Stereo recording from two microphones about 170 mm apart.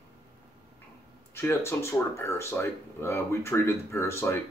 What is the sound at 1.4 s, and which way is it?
Speech, 15° left (ahead or behind).